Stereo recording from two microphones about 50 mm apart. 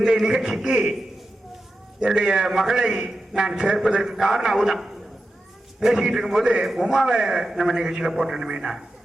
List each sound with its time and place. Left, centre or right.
0.0 s a man's voice: centre
2.0 s a man's voice: centre